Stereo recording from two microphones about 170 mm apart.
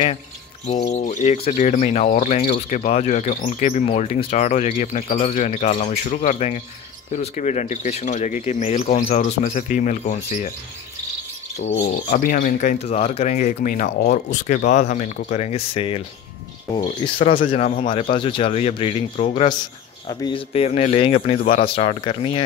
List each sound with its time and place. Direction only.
1.0 s speech: 45° left (ahead or behind)
9.1 s speech: 45° left (ahead or behind)
12.1 s speech: 55° left (ahead or behind)
12.8 s speech: 35° left (ahead or behind)
21.4 s speech: 50° left (ahead or behind)
21.6 s speech: 35° left (ahead or behind)